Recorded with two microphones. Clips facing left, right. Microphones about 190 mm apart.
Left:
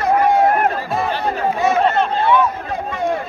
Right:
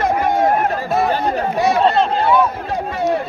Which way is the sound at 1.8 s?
35° right (ahead or behind).